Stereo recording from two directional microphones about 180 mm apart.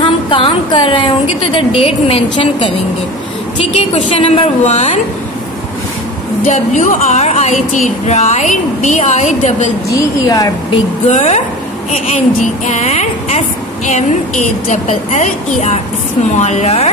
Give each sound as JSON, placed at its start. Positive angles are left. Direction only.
{"t": 0.0, "sound": "a woman's voice", "side_deg": 30}
{"t": 6.4, "sound": "a woman's voice", "side_deg": 40}
{"t": 9.8, "sound": "speech", "side_deg": 20}
{"t": 11.1, "sound": "a woman's voice", "side_deg": 40}
{"t": 12.6, "sound": "a woman's voice", "side_deg": 40}